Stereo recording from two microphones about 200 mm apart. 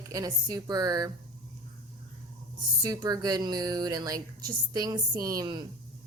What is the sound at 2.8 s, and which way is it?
A woman's voice, 20° right (ahead or behind).